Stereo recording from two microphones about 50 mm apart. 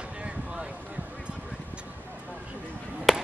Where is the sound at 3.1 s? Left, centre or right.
Centre.